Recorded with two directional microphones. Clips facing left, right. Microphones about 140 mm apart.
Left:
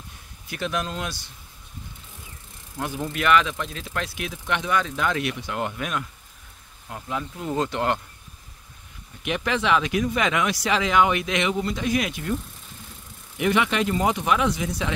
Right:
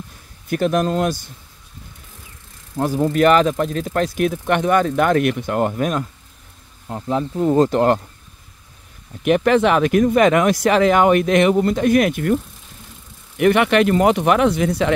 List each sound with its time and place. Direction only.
0.5 s speech: 45° right (ahead or behind)
2.8 s speech: 40° right (ahead or behind)
9.2 s speech: 50° right (ahead or behind)
13.4 s speech: 60° right (ahead or behind)